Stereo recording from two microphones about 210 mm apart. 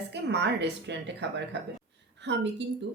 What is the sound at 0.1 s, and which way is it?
Speech, 55° right (ahead or behind).